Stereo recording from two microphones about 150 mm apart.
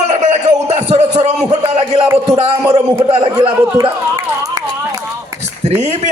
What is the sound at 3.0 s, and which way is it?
Speech, 40° right (ahead or behind).